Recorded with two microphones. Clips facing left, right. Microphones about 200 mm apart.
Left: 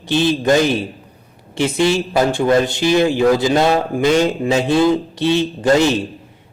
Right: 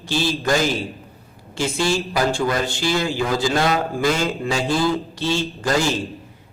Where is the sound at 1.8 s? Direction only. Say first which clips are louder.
Left 5 dB; 20° left (ahead or behind).